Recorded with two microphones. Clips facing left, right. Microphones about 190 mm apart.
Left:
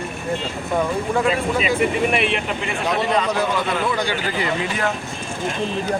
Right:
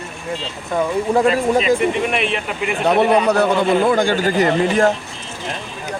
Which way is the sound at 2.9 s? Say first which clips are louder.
Right 7 dB; 60° right (ahead or behind).